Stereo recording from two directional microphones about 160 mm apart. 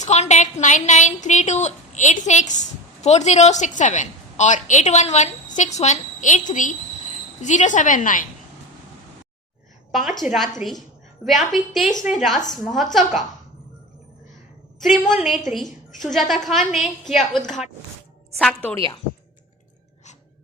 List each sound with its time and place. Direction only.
0.0 s a woman's voice: 45° left (ahead or behind)
9.9 s a woman's voice: centre (ahead or behind)
14.8 s a woman's voice: centre (ahead or behind)